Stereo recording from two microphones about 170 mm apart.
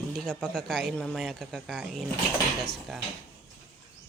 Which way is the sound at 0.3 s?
5° left (ahead or behind).